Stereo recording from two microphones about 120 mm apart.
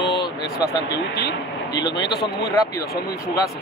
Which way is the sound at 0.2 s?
35° left (ahead or behind).